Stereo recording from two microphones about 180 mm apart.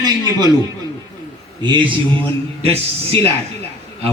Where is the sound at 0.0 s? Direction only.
20° right (ahead or behind).